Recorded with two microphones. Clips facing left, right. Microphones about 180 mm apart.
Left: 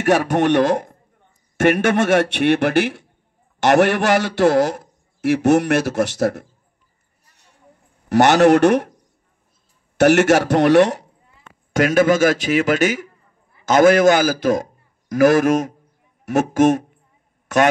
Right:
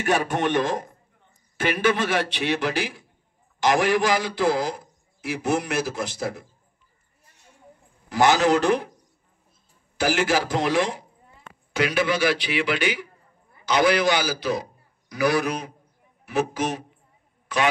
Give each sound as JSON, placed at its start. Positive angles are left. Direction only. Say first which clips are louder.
{"t": 0.0, "sound": "a man's voice", "louder": "left 7 dB", "side_deg": 70}
{"t": 1.7, "sound": "a man's voice", "louder": "left 6 dB", "side_deg": 60}
{"t": 8.1, "sound": "a man's voice", "louder": "left 7 dB", "side_deg": 70}
{"t": 9.9, "sound": "a man's voice", "louder": "left 9 dB", "side_deg": 70}
{"t": 11.7, "sound": "a man's voice", "louder": "left 8 dB", "side_deg": 45}